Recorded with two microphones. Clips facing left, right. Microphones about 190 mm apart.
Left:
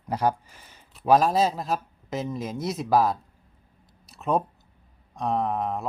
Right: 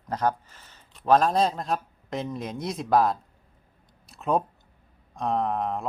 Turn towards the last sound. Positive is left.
turn(degrees=0)  # may be behind; listen again after turning